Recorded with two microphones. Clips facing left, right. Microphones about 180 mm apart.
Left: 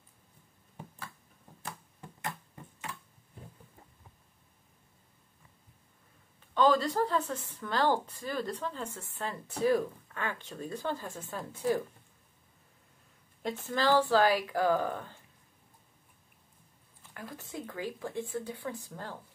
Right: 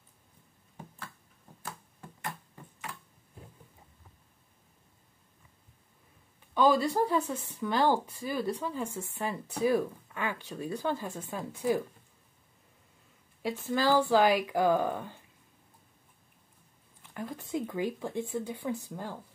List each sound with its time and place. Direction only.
6.5 s a woman's voice: 10° right (ahead or behind)
13.4 s a woman's voice: 10° right (ahead or behind)
17.1 s a woman's voice: 20° right (ahead or behind)